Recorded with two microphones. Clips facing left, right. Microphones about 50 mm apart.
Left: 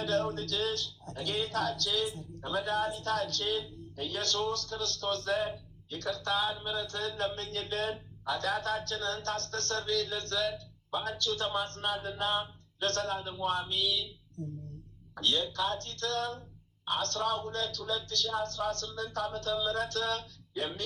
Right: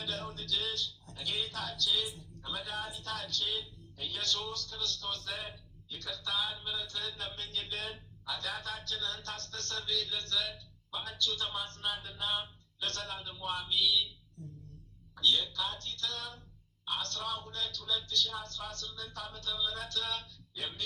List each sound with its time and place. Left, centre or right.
0.0 s a man's voice: left
15.1 s a man's voice: left